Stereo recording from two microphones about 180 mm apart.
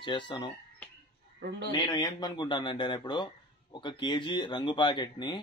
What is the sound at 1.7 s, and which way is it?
Speech, 25° left (ahead or behind).